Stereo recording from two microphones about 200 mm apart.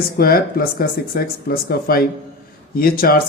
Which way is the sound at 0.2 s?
50° left (ahead or behind).